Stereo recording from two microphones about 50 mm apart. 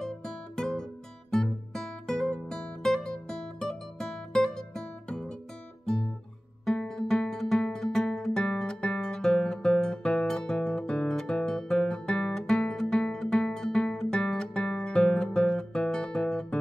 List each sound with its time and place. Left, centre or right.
0.0 s music: centre
1.3 s guitar: centre
6.7 s music: centre
12.3 s guitar: centre
14.8 s music: centre
15.3 s guitar: centre